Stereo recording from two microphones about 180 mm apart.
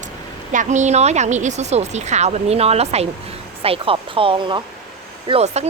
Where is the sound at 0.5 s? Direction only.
45° right (ahead or behind).